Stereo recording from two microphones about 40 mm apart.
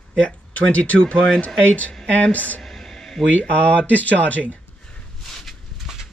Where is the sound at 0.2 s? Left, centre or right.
Left.